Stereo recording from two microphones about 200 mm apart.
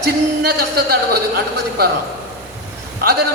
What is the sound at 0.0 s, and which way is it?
Speech, 50° right (ahead or behind).